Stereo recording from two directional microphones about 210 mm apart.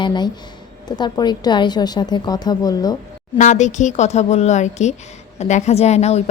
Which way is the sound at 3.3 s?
35° left (ahead or behind).